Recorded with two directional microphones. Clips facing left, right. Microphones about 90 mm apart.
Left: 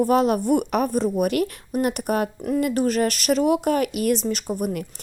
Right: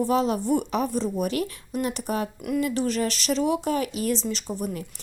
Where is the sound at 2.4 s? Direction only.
35° left (ahead or behind).